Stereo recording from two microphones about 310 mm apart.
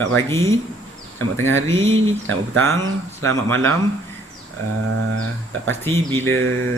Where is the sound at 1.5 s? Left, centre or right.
Right.